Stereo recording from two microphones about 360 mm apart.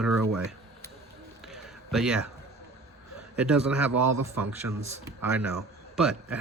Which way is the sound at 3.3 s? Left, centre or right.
Centre.